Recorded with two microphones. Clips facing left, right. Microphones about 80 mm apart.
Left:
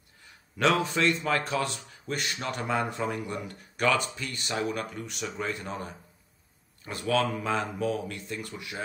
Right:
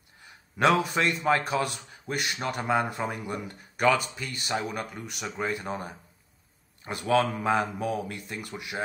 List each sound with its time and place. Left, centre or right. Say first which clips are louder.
0.6 s a man's voice: right 2 dB; centre
1.4 s a man's voice: right 2 dB; centre